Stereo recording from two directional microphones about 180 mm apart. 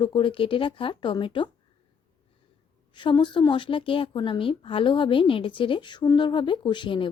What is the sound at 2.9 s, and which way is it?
Speech, 25° left (ahead or behind).